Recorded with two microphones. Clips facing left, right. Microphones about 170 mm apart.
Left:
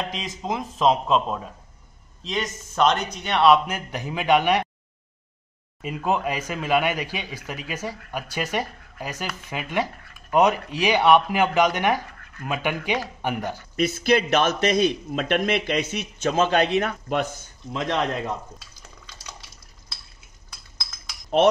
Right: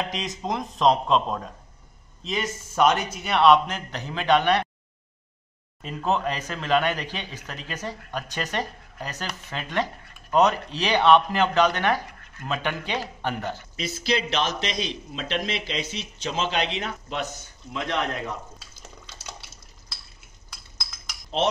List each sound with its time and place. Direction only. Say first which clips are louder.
0.0 s a man's voice: right 1 dB; centre (ahead or behind)
5.8 s a man's voice: left 1 dB; 10° left (ahead or behind)
13.7 s a man's voice: left 7 dB; 55° left (ahead or behind)
21.3 s cutlery: left 7 dB; 55° left (ahead or behind)